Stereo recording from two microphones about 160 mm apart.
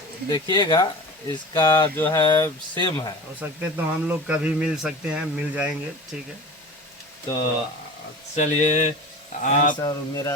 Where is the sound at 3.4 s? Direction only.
10° right (ahead or behind).